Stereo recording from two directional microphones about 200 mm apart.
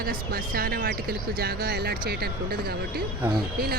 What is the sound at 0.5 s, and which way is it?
Speech, 50° right (ahead or behind).